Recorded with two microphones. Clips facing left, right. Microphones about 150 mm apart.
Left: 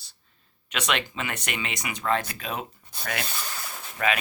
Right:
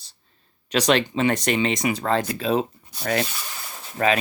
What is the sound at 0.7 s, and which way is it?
Speech, 35° right (ahead or behind).